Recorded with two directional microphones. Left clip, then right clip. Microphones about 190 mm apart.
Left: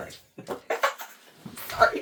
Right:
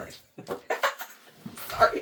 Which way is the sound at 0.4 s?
5° left (ahead or behind).